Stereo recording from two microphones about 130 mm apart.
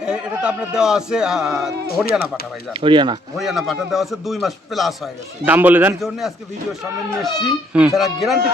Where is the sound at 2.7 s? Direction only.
40° right (ahead or behind).